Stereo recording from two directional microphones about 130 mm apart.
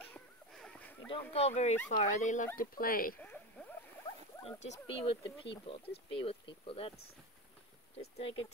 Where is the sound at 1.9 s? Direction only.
70° left (ahead or behind); by 3.2 s 90° left.